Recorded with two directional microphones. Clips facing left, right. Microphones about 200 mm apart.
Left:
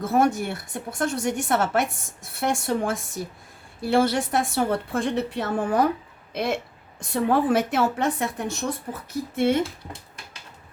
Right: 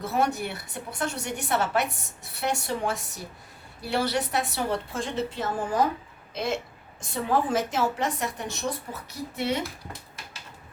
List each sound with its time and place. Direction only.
0.0 s a woman's voice: 50° left (ahead or behind)